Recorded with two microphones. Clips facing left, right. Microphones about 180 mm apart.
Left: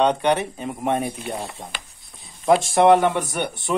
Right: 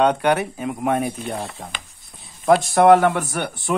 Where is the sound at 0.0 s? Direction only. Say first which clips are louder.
Right 1 dB; 5° right (ahead or behind).